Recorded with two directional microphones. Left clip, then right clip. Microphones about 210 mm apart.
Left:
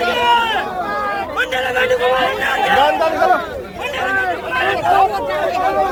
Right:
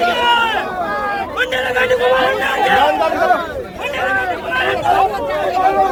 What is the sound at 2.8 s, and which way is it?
Chatter, 50° left (ahead or behind).